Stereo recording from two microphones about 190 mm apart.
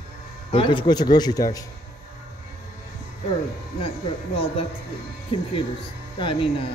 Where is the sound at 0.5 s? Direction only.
25° left (ahead or behind).